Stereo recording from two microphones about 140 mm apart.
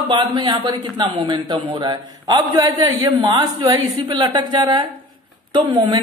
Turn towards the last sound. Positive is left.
turn(degrees=-30)  # may be behind; listen again after turning